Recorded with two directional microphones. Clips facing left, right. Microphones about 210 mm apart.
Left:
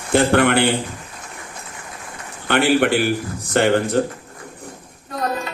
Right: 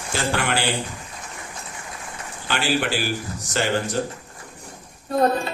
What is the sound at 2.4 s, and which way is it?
A man's voice, 60° left (ahead or behind).